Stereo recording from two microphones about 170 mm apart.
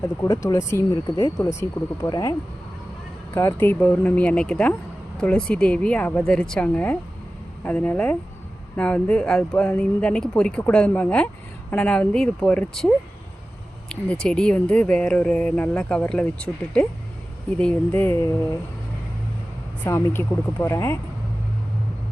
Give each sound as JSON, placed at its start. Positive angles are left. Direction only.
{"t": 0.0, "sound": "speech", "side_deg": 20}
{"t": 3.3, "sound": "speech", "side_deg": 15}
{"t": 13.9, "sound": "speech", "side_deg": 5}
{"t": 19.8, "sound": "speech", "side_deg": 10}